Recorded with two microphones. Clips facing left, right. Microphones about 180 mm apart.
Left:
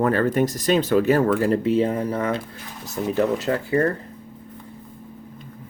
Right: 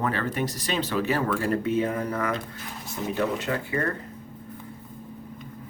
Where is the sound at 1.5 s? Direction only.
30° left (ahead or behind).